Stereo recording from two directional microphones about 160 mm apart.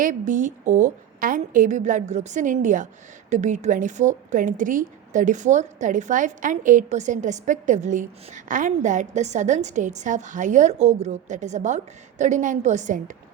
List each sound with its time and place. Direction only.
0.0 s a woman's voice: 55° right (ahead or behind)